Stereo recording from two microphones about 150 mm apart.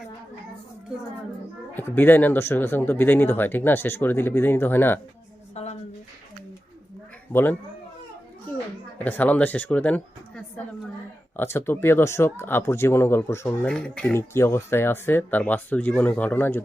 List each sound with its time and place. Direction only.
1.7 s speech: 15° left (ahead or behind)
5.6 s a sound: 45° left (ahead or behind)
9.0 s speech: 10° left (ahead or behind)
13.7 s speech: 5° left (ahead or behind)
14.2 s speech: 15° left (ahead or behind)